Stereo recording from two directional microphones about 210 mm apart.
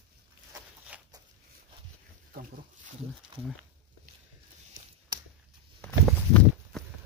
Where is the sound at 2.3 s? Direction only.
40° right (ahead or behind).